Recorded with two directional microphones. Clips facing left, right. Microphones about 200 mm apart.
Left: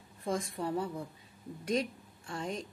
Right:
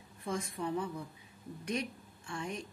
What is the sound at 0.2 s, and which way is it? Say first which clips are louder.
Speech: left 3 dB; 30° left (ahead or behind).